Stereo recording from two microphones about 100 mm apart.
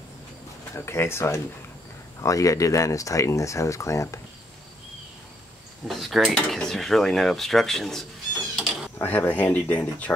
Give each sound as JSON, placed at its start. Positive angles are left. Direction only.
{"t": 0.7, "sound": "speech", "side_deg": 25}
{"t": 5.9, "sound": "speech", "side_deg": 0}
{"t": 8.9, "sound": "speech", "side_deg": 20}